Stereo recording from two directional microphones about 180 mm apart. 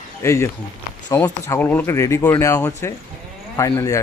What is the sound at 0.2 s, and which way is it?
Speech, 15° left (ahead or behind).